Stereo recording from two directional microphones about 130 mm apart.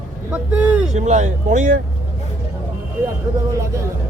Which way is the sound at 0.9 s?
65° right (ahead or behind).